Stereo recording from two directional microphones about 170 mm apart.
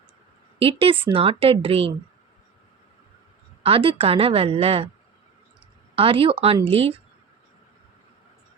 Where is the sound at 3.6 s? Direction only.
30° right (ahead or behind).